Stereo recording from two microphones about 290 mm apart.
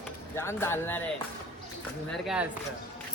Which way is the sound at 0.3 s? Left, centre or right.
Centre.